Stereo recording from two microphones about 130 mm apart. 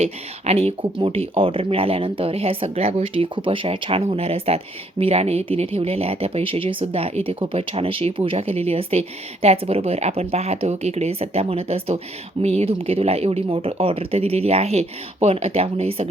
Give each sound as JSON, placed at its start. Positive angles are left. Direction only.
{"t": 0.0, "sound": "speech", "side_deg": -55}